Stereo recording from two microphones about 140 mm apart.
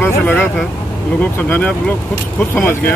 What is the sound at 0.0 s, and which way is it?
Speech, 15° left (ahead or behind).